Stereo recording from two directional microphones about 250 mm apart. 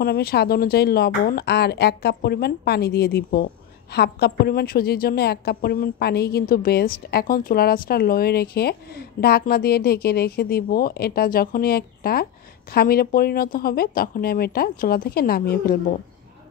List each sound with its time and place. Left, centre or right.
0.0 s speech: left